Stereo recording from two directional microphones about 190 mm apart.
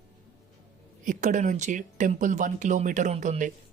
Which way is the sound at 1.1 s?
40° right (ahead or behind).